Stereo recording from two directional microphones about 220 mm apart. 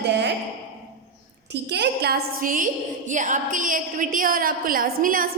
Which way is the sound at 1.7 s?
50° right (ahead or behind).